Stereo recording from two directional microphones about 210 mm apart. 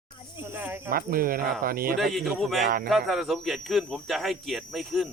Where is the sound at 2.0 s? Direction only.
Centre (ahead or behind).